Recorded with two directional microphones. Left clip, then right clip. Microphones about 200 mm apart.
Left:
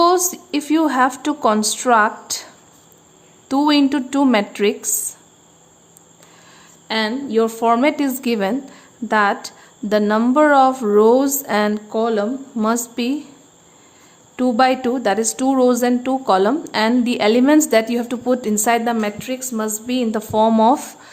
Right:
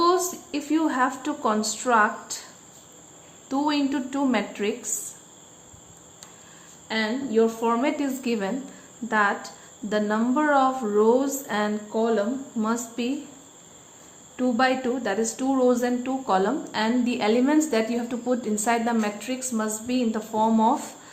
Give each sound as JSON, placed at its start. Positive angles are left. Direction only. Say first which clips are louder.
{"t": 0.0, "sound": "a woman's voice", "louder": "left 7 dB", "side_deg": 55}
{"t": 3.5, "sound": "speech", "louder": "left 9 dB", "side_deg": 55}
{"t": 6.8, "sound": "a woman's voice", "louder": "left 6 dB", "side_deg": 55}
{"t": 14.3, "sound": "a woman's voice", "louder": "left 7 dB", "side_deg": 55}